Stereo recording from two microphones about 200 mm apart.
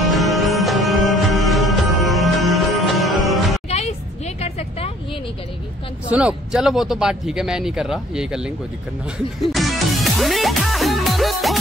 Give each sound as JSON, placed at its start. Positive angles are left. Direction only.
{"t": 0.0, "sound": "music", "side_deg": 0}
{"t": 3.6, "sound": "music", "side_deg": 30}
{"t": 4.4, "sound": "a sound", "side_deg": 30}
{"t": 6.0, "sound": "speech", "side_deg": -5}
{"t": 9.4, "sound": "music", "side_deg": 0}